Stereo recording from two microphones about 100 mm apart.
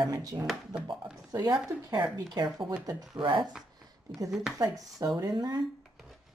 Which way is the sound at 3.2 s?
50° right (ahead or behind).